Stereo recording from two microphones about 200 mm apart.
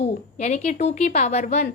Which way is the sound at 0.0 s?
35° left (ahead or behind).